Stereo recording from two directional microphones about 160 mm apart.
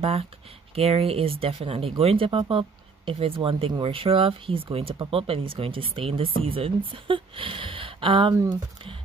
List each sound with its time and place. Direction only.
0.0 s speech: 40° right (ahead or behind)